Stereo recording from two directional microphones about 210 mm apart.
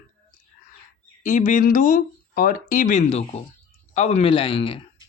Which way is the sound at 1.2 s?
35° left (ahead or behind).